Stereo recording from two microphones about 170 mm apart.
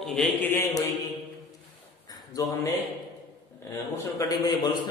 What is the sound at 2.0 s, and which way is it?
A man's voice, 20° left (ahead or behind).